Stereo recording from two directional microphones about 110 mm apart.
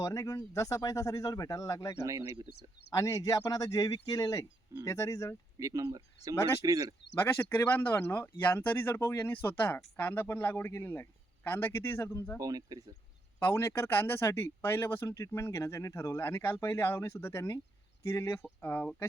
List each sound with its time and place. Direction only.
0.0 s speech: 30° left (ahead or behind)
2.0 s speech: 30° right (ahead or behind)
2.9 s speech: 30° left (ahead or behind)
5.5 s speech: 30° right (ahead or behind)
7.2 s speech: 25° left (ahead or behind)
12.4 s speech: 35° right (ahead or behind)
13.4 s speech: 25° left (ahead or behind)